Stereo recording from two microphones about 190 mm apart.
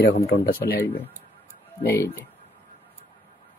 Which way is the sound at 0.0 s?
55° left (ahead or behind).